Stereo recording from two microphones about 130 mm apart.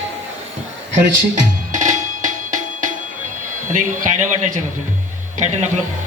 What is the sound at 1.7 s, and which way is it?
Music, 80° right.